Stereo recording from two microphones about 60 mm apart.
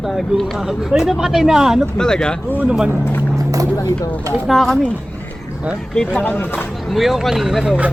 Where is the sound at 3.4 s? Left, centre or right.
Right.